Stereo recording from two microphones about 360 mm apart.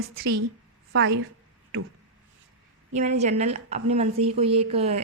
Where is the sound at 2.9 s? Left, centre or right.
Centre.